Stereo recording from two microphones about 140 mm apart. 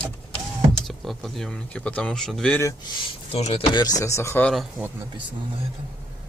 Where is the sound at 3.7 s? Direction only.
25° left (ahead or behind).